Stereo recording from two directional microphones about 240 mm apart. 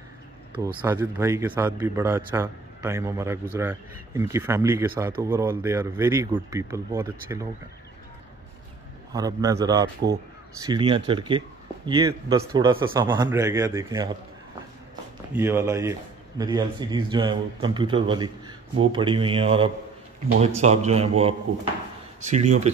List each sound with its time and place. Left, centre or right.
0.8 s a man's voice: centre
9.1 s a man's voice: centre
15.3 s speech: centre; by 22.7 s right